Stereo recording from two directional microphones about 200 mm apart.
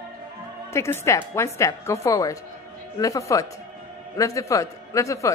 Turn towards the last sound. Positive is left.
turn(degrees=15)  # may be behind; listen again after turning